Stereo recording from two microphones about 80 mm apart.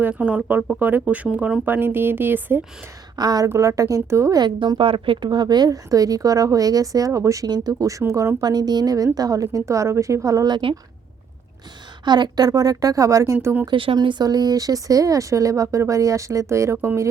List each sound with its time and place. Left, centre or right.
0.0 s speech: centre
1.6 s speech: right
3.2 s a woman's voice: right
3.5 s speech: right
4.4 s a woman's voice: right
7.5 s a woman's voice: right
8.4 s a woman's voice: right
10.5 s speech: right
12.0 s a woman's voice: right
13.7 s speech: right
14.3 s a woman's voice: right